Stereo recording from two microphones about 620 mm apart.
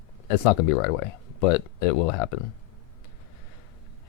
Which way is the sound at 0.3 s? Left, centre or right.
Left.